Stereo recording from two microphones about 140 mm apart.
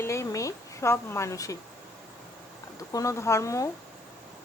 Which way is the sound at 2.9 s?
25° left (ahead or behind).